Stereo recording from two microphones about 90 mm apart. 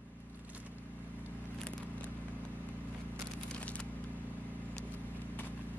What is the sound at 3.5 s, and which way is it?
Crumpling, 10° left (ahead or behind).